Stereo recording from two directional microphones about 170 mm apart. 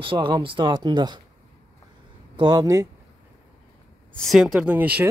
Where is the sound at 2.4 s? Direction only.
25° right (ahead or behind).